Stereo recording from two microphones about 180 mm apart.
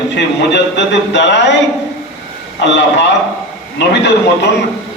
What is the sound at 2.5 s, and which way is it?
A man's voice, 80° left.